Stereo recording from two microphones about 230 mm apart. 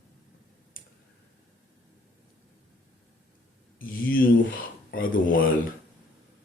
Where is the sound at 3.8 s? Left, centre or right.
Left.